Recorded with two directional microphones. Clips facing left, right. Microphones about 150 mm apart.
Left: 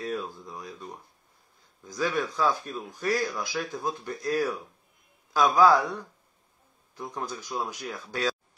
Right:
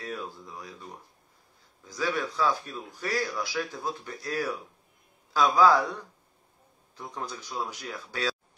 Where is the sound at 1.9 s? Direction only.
15° left (ahead or behind).